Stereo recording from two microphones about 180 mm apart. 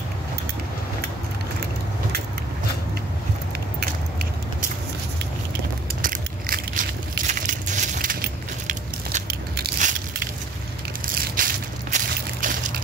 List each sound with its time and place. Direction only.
6.0 s crushing: 50° right (ahead or behind)
9.3 s biting: 50° right (ahead or behind)
11.3 s a sound: 50° right (ahead or behind)